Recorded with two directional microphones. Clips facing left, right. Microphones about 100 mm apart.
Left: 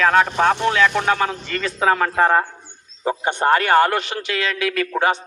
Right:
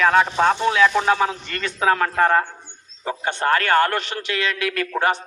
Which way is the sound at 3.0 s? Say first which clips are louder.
Left 3 dB; 20° left (ahead or behind).